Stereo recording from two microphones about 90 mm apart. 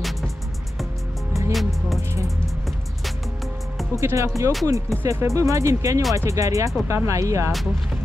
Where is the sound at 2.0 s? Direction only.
30° right (ahead or behind).